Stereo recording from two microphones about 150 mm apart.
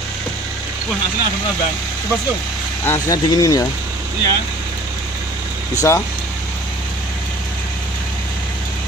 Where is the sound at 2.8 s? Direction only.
20° left (ahead or behind).